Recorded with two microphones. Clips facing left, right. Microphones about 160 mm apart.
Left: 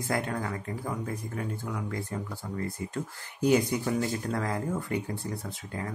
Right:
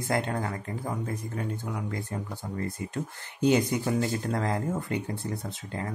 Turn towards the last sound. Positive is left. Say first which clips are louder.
# right 2 dB
turn(degrees=-25)  # may be behind; listen again after turning